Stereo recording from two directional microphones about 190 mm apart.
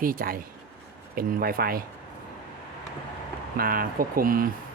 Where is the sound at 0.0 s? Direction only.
50° right (ahead or behind).